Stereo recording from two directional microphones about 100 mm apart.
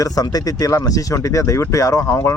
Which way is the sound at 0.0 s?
40° left (ahead or behind).